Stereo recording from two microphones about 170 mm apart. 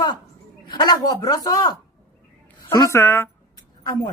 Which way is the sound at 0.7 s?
25° left (ahead or behind).